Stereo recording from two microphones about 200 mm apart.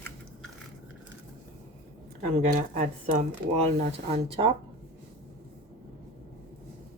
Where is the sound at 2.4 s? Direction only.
40° right (ahead or behind).